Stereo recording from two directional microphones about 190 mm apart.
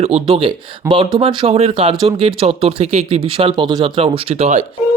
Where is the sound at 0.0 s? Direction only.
30° right (ahead or behind).